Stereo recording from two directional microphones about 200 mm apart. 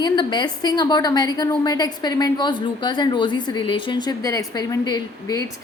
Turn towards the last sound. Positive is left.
turn(degrees=20)  # may be behind; listen again after turning